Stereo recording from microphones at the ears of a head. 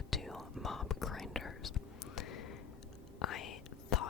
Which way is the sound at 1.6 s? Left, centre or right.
Left.